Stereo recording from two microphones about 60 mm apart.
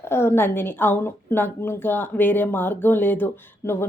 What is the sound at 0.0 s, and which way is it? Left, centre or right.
Speech, left.